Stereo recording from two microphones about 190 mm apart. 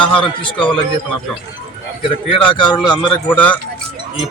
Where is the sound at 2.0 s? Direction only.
25° left (ahead or behind).